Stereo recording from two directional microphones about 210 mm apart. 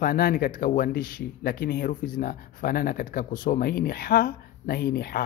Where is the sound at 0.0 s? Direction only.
45° left (ahead or behind).